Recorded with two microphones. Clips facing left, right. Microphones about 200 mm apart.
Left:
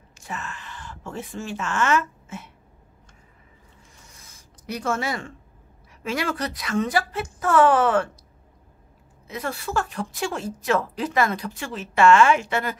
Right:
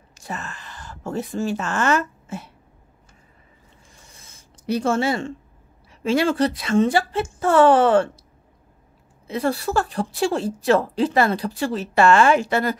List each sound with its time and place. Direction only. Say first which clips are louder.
0.1 s speech: right 2 dB; 40° right (ahead or behind)
4.1 s writing: right 1 dB; 30° right (ahead or behind)
6.0 s speech: right 8 dB; 30° right (ahead or behind)
9.3 s a woman's voice: right 6 dB; 35° right (ahead or behind)